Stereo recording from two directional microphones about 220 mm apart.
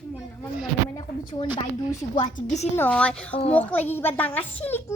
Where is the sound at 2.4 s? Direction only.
35° left (ahead or behind).